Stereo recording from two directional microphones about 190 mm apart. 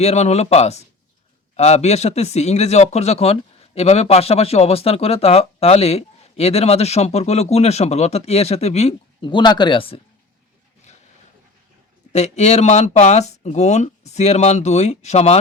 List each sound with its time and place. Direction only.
0.0 s speech: 35° left (ahead or behind)
12.1 s speech: 35° left (ahead or behind)